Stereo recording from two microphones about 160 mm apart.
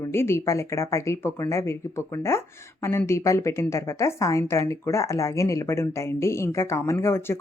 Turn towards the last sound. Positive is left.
turn(degrees=15)  # may be behind; listen again after turning